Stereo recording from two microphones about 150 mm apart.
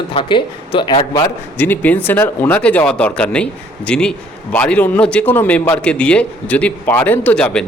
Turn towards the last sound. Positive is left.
turn(degrees=10)  # may be behind; listen again after turning